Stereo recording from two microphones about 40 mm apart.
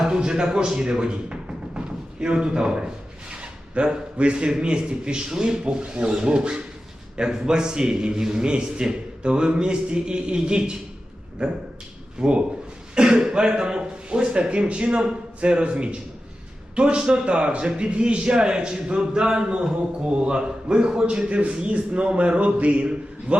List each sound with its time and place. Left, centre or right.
0.1 s speech: right
2.2 s a sound: right
3.8 s a man's voice: right
21.2 s a man's voice: right